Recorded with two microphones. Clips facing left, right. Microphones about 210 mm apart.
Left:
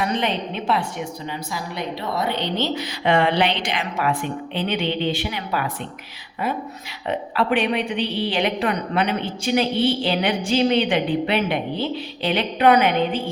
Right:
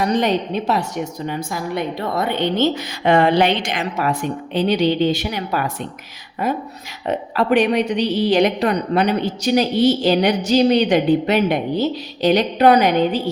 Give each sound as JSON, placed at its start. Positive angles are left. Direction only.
{"t": 0.0, "sound": "a woman's voice", "side_deg": -40}
{"t": 7.1, "sound": "a woman's voice", "side_deg": -40}